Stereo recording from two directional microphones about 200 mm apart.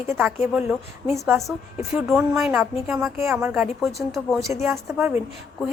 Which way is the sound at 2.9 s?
10° right (ahead or behind).